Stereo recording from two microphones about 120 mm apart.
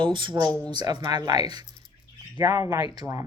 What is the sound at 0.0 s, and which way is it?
Speech, 40° right (ahead or behind).